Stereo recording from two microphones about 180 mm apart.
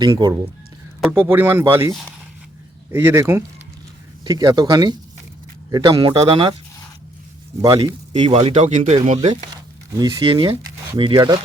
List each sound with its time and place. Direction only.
0.0 s speech: 25° right (ahead or behind)
1.1 s speech: 10° right (ahead or behind)
1.9 s speech: centre (ahead or behind)
2.9 s speech: 10° right (ahead or behind); by 6.6 s 30° right (ahead or behind)
7.6 s speech: 20° right (ahead or behind); by 9.3 s 40° right (ahead or behind)
10.0 s speech: 20° right (ahead or behind)